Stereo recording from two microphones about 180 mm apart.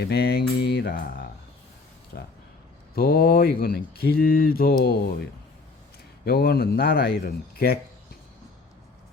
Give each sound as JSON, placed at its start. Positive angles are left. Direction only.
{"t": 0.0, "sound": "mantra", "side_deg": 65}
{"t": 2.1, "sound": "speech", "side_deg": 60}